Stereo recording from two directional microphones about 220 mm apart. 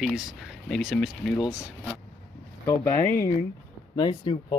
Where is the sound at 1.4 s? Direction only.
15° left (ahead or behind).